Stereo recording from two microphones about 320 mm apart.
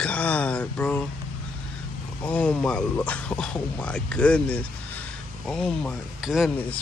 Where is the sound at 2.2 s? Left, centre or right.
Centre.